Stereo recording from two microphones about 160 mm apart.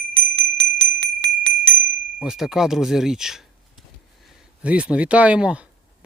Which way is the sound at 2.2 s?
5° right (ahead or behind).